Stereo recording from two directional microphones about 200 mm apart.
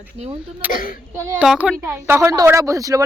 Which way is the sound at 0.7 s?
45° left (ahead or behind).